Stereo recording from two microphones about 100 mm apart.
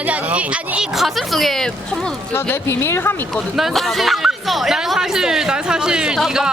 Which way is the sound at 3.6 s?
Centre (ahead or behind).